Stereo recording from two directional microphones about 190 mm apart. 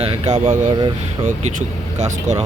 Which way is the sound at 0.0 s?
30° right (ahead or behind).